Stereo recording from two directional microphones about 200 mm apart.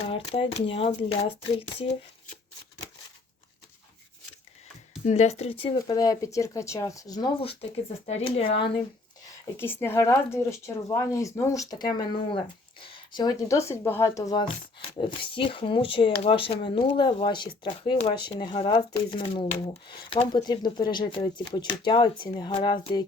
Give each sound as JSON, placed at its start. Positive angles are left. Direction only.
{"t": 0.1, "sound": "speech", "side_deg": 30}
{"t": 5.0, "sound": "speech", "side_deg": 35}
{"t": 9.6, "sound": "speech", "side_deg": 10}